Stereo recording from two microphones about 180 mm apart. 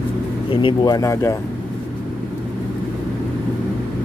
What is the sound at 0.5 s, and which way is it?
Speech, 25° left (ahead or behind).